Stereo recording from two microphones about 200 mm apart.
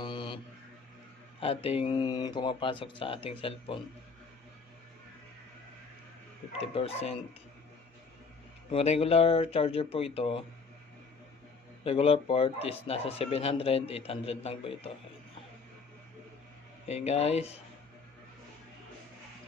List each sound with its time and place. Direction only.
0.0 s mantra: 25° left (ahead or behind)
1.4 s speech: 30° left (ahead or behind)
6.6 s speech: 30° left (ahead or behind)
8.6 s speech: 30° left (ahead or behind)
11.8 s speech: 30° left (ahead or behind)
16.8 s speech: 30° left (ahead or behind)